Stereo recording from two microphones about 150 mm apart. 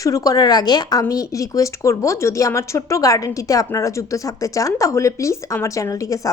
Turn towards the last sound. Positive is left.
turn(degrees=20)  # may be behind; listen again after turning